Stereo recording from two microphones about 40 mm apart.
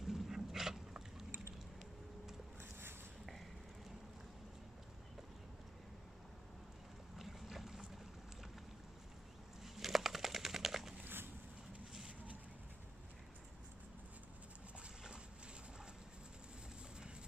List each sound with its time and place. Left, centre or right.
0.0 s dog: centre
7.2 s boat: centre
9.8 s a sound: centre